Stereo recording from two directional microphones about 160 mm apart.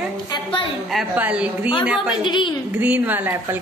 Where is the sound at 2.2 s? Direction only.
30° left (ahead or behind).